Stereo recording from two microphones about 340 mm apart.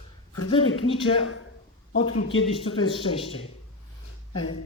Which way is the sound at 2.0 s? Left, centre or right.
Left.